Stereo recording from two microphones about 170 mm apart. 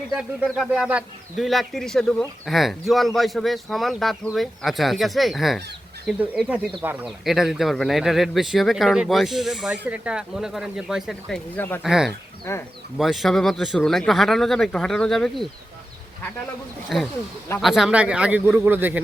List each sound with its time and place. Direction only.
0.1 s speech: centre (ahead or behind)
11.5 s speech: 10° left (ahead or behind)
11.8 s speech: centre (ahead or behind)
12.5 s speech: 15° left (ahead or behind)
13.0 s speech: centre (ahead or behind)
16.9 s a man's voice: centre (ahead or behind)